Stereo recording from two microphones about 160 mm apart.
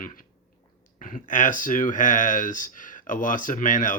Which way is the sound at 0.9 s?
55° left (ahead or behind).